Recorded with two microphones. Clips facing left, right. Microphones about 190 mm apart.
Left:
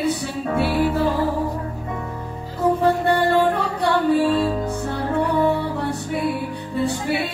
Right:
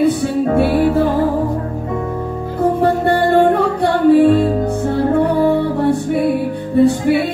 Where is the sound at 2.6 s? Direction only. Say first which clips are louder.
Right 4 dB; 55° right (ahead or behind).